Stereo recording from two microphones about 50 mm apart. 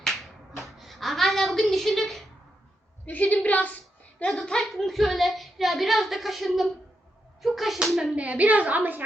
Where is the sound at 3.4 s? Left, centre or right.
Left.